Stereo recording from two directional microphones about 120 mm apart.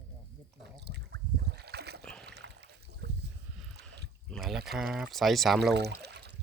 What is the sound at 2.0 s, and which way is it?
Splash, 5° left (ahead or behind).